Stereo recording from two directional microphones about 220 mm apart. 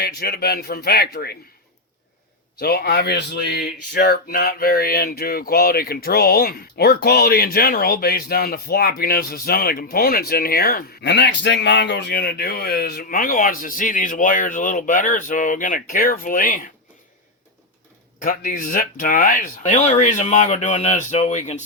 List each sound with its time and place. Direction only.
0.0 s speech: 45° left (ahead or behind)
2.6 s speech: 45° left (ahead or behind)
18.2 s speech: 40° left (ahead or behind)